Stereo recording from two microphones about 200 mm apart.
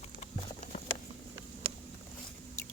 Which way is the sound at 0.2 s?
35° left (ahead or behind).